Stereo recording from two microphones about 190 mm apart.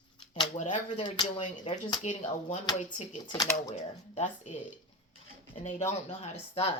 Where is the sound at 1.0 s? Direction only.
25° left (ahead or behind).